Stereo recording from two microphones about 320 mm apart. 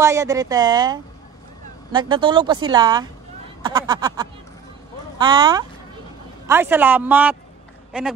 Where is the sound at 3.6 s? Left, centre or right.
Centre.